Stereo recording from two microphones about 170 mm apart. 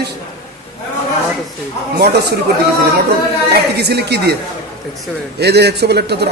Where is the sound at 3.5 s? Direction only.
75° right (ahead or behind).